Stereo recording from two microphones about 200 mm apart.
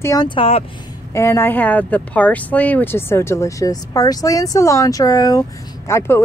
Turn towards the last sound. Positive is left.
turn(degrees=15)  # may be behind; listen again after turning